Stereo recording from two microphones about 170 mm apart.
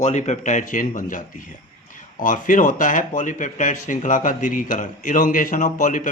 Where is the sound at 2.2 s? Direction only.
50° left (ahead or behind).